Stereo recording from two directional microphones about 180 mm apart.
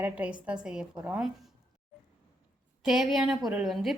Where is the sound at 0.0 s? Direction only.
10° right (ahead or behind).